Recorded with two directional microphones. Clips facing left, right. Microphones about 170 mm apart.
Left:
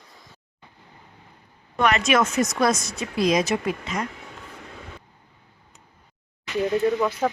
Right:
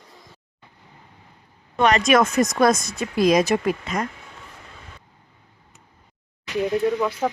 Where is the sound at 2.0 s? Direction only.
50° right (ahead or behind).